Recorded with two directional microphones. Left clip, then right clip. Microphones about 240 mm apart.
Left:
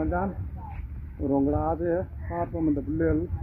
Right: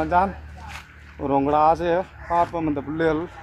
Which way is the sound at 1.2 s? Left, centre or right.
Right.